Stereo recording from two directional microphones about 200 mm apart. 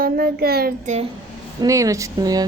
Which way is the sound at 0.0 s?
50° right (ahead or behind).